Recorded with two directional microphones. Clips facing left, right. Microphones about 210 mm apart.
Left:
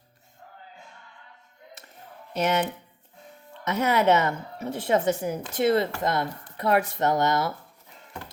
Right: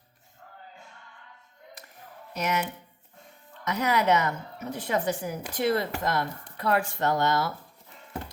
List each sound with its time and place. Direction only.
2.3 s speech: 25° left (ahead or behind)
3.6 s a woman's voice: 25° left (ahead or behind)